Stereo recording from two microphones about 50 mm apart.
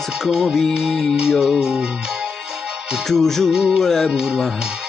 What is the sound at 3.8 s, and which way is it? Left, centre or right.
Music, centre.